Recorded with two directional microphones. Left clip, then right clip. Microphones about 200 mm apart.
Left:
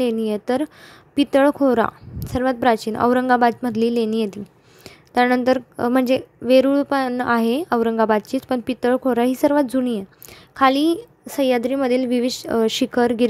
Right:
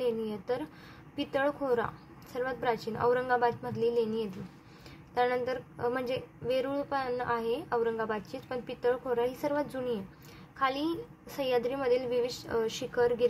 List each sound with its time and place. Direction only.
0.0 s a woman's voice: 45° left (ahead or behind)